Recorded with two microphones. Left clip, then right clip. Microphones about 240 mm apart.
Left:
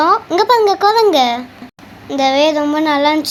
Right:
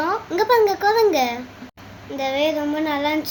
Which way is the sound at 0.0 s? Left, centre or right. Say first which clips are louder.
Left 9 dB; left.